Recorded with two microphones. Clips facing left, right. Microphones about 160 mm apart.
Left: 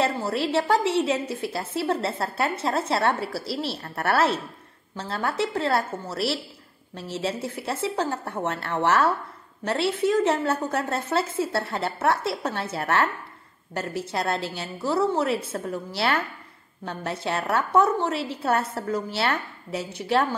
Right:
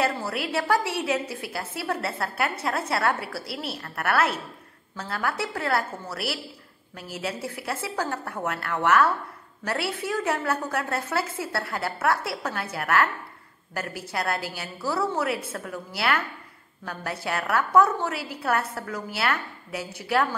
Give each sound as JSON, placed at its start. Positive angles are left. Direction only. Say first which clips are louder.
{"t": 0.0, "sound": "a woman's voice", "louder": "left 2 dB", "side_deg": 25}